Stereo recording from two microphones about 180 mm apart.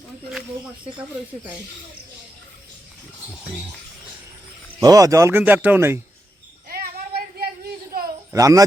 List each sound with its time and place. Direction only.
3.2 s speech: 5° right (ahead or behind)
4.8 s speech: 20° right (ahead or behind)
6.7 s child singing: 55° right (ahead or behind)
8.3 s a child's voice: 20° right (ahead or behind)